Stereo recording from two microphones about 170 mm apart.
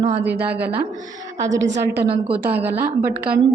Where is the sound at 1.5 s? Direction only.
90° right.